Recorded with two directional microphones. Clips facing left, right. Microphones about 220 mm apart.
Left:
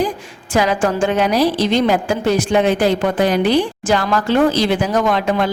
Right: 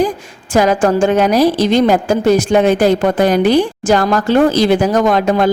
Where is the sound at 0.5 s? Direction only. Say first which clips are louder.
Right 5 dB; 45° right (ahead or behind).